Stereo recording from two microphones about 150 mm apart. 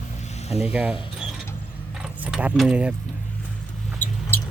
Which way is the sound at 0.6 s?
5° right (ahead or behind).